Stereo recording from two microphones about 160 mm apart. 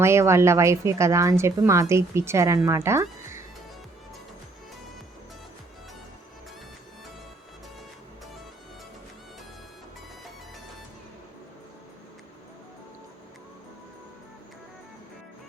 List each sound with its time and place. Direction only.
0.0 s speech: 15° right (ahead or behind)